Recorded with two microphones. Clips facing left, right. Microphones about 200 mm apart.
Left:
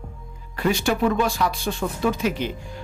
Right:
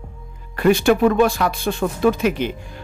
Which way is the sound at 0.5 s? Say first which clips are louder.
Right 7 dB; 55° right (ahead or behind).